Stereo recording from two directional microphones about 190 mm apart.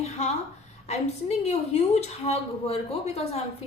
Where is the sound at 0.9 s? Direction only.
35° left (ahead or behind).